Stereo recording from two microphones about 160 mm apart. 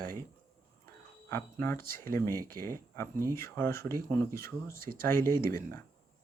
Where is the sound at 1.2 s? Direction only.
15° left (ahead or behind).